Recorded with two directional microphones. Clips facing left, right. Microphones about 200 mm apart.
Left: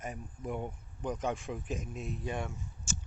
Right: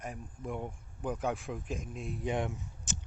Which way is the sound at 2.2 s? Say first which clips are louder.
Right 7 dB; 15° right (ahead or behind).